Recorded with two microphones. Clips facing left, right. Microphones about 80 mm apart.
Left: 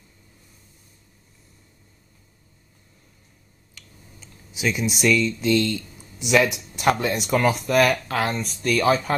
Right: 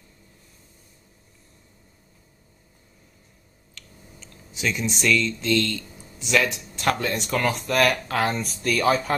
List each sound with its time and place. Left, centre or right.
3.7 s speech: centre